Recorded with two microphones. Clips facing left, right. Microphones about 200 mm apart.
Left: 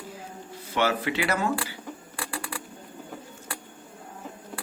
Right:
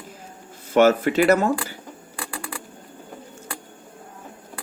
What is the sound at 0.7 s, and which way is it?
Speech, 45° right (ahead or behind).